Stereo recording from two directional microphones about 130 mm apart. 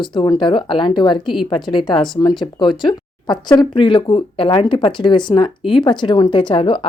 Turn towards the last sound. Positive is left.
turn(degrees=40)  # may be behind; listen again after turning